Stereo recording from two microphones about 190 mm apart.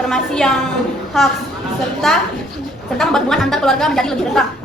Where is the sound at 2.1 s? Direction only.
Centre (ahead or behind).